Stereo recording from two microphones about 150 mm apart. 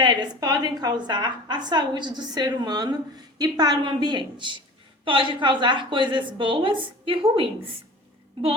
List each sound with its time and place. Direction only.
0.0 s a woman's voice: 30° right (ahead or behind)